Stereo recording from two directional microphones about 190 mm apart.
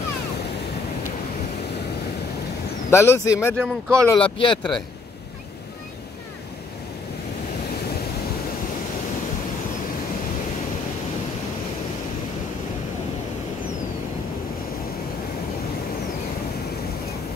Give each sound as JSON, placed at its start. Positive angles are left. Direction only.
{"t": 2.9, "sound": "speech", "side_deg": 15}
{"t": 4.2, "sound": "speech", "side_deg": 25}